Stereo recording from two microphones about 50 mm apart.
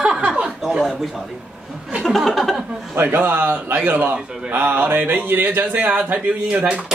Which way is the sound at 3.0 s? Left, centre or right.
Right.